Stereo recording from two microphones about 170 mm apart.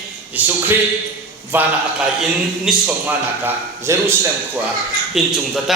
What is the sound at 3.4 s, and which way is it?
Speech, 15° right (ahead or behind).